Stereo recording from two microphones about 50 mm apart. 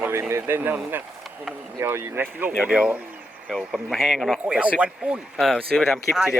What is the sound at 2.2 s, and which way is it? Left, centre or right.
Speech, right.